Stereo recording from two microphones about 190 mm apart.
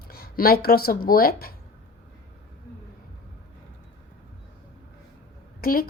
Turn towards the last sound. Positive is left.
turn(degrees=50)  # may be behind; listen again after turning